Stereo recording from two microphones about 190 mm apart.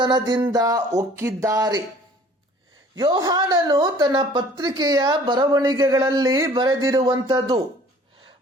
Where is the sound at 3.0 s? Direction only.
20° right (ahead or behind).